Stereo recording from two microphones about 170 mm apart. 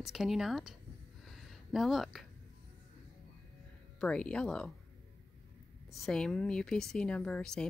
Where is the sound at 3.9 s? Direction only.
5° left (ahead or behind).